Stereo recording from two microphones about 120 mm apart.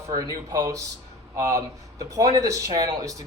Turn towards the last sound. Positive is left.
turn(degrees=-30)  # may be behind; listen again after turning